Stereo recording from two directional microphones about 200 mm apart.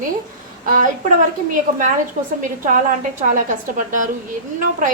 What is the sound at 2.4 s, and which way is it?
A woman's voice, 40° right (ahead or behind).